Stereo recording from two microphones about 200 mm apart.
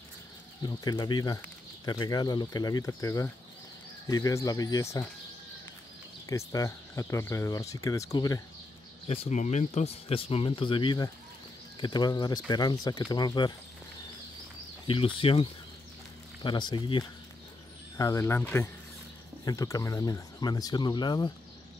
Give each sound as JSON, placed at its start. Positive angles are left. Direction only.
{"t": 0.7, "sound": "speech", "side_deg": 20}
{"t": 6.2, "sound": "speech", "side_deg": 15}
{"t": 9.0, "sound": "speech", "side_deg": 30}
{"t": 14.9, "sound": "speech", "side_deg": 25}
{"t": 16.4, "sound": "speech", "side_deg": 20}